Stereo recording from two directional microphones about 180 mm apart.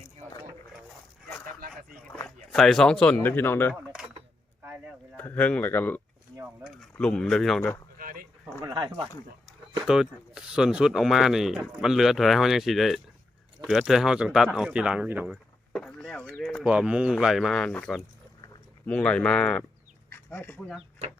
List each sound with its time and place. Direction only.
2.0 s speech: 5° left (ahead or behind)
4.6 s a sound: 10° right (ahead or behind)
5.1 s speech: 10° left (ahead or behind)
7.9 s a sound: 50° right (ahead or behind)
8.6 s speech: 25° right (ahead or behind)
9.8 s speech: 5° right (ahead or behind)
15.7 s speech: 5° left (ahead or behind)